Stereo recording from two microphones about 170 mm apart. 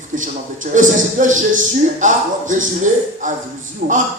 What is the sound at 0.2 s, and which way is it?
Speech, 50° right (ahead or behind).